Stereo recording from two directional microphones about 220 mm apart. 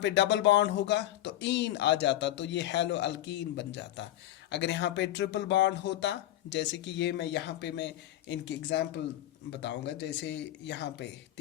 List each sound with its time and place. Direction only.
0.0 s speech: 55° left (ahead or behind)